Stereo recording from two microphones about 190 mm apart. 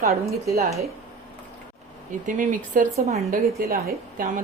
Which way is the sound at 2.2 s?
45° right (ahead or behind).